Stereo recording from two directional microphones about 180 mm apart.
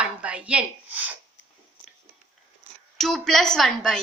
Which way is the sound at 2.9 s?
Centre (ahead or behind).